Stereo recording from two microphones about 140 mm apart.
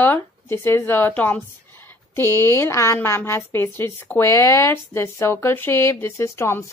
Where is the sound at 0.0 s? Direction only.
15° left (ahead or behind).